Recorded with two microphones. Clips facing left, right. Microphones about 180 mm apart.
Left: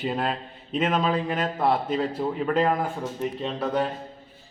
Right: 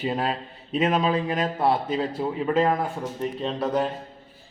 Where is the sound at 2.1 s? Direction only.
5° right (ahead or behind).